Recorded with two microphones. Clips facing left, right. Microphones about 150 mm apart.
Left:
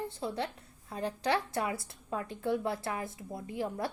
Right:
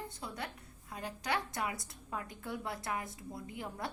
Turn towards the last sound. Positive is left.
turn(degrees=25)  # may be behind; listen again after turning